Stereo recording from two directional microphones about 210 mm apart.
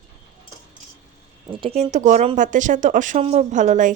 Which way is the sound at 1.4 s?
25° right (ahead or behind).